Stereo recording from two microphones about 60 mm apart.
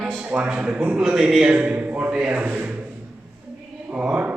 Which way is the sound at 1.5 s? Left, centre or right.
Right.